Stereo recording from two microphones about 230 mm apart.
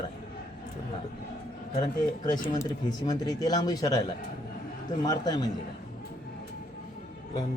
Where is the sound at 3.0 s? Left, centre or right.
Centre.